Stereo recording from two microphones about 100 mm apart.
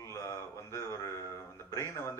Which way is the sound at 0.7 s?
30° left (ahead or behind).